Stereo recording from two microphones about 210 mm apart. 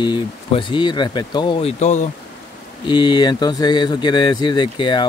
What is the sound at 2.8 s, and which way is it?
Speech, 20° left (ahead or behind).